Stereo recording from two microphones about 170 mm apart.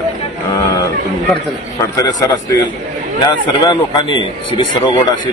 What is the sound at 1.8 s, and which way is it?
A man's voice, 20° left (ahead or behind).